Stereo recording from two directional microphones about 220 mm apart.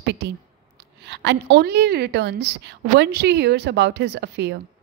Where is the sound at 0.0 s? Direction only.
50° right (ahead or behind).